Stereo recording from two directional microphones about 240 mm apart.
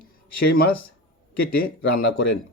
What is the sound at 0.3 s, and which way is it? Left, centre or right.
Speech, left.